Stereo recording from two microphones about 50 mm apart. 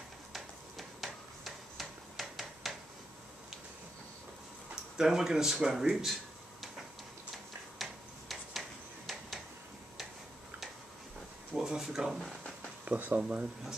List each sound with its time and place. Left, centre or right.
0.3 s tick-tock: centre
4.9 s speech: centre
7.8 s tick-tock: centre
11.5 s speech: centre
12.8 s speech: right